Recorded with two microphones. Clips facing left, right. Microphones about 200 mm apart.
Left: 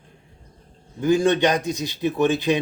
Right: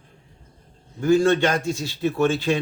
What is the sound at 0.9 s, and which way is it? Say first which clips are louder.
Speech: right 1 dB; 15° left (ahead or behind).